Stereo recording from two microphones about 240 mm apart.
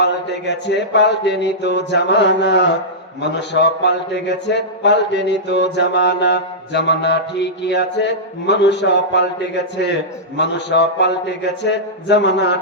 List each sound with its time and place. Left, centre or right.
0.0 s a man's voice: left